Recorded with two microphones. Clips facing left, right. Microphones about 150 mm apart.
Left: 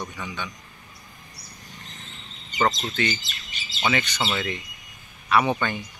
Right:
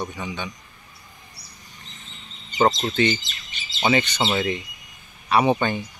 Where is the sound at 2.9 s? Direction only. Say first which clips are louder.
Right 6 dB; 25° right (ahead or behind).